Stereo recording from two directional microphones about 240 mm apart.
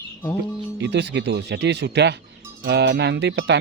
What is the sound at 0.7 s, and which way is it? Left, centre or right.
Speech, right.